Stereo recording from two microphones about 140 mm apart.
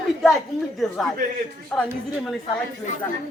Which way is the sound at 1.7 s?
5° left (ahead or behind).